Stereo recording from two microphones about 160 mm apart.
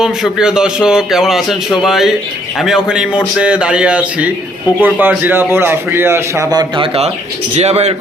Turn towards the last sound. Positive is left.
turn(degrees=-40)  # may be behind; listen again after turning